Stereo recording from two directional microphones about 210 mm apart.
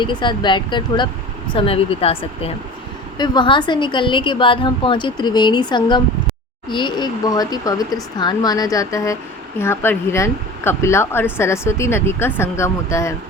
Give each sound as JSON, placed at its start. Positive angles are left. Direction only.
{"t": 0.0, "sound": "a woman's voice", "side_deg": 20}